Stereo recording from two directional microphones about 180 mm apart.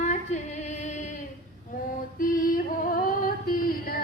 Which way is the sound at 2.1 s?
50° left (ahead or behind).